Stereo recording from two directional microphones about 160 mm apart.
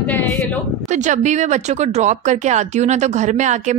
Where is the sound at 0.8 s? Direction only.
50° right (ahead or behind).